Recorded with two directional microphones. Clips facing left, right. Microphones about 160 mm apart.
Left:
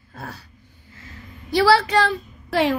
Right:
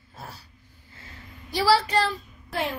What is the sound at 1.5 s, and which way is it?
A woman's voice, 70° left (ahead or behind).